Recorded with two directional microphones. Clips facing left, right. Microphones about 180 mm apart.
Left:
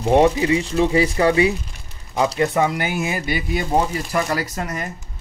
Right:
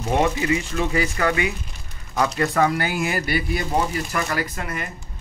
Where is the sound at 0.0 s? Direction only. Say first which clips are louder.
Left 6 dB; 30° left (ahead or behind).